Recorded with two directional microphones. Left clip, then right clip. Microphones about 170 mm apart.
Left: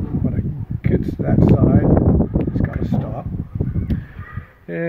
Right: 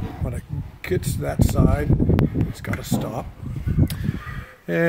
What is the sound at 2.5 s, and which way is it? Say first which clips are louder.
Speech: left 4 dB; 25° right (ahead or behind).